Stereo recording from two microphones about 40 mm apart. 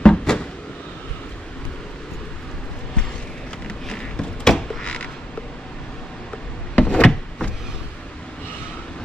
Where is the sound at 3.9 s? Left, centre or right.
Centre.